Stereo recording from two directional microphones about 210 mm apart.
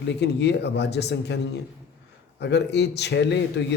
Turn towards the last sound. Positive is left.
turn(degrees=55)  # may be behind; listen again after turning